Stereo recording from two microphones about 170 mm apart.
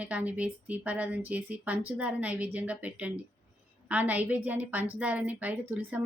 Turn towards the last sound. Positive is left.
turn(degrees=-10)  # may be behind; listen again after turning